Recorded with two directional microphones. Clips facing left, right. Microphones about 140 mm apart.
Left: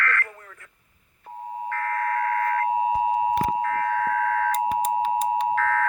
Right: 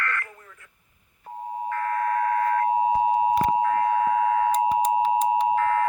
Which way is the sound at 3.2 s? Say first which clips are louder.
Right 2 dB; 20° right (ahead or behind).